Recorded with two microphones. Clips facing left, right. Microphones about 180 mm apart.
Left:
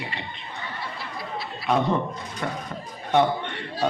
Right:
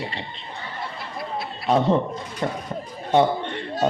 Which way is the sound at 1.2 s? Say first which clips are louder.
Right 5 dB; 55° right (ahead or behind).